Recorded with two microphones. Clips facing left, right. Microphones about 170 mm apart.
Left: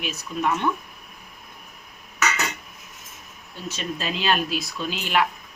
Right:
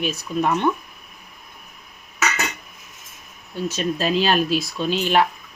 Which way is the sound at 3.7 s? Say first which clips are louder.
Right 7 dB; 40° right (ahead or behind).